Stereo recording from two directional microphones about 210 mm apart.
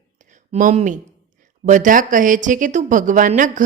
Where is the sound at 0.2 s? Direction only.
35° right (ahead or behind).